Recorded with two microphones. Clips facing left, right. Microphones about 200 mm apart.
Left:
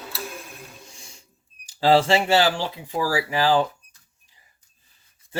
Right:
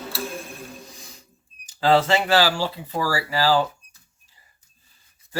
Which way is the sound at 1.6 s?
30° left (ahead or behind).